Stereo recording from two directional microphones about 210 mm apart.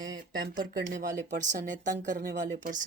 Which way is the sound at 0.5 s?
40° right (ahead or behind).